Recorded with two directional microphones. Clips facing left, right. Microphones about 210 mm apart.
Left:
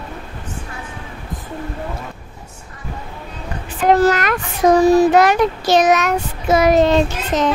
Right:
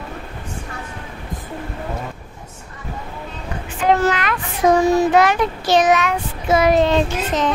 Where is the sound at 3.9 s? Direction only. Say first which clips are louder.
Left 4 dB; 40° left (ahead or behind).